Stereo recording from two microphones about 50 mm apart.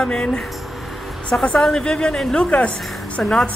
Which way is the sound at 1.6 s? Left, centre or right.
Centre.